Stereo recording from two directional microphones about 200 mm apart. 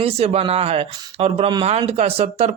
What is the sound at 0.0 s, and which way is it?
Speech, 30° right (ahead or behind).